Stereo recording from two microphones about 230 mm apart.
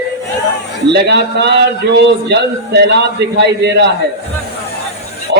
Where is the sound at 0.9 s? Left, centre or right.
Right.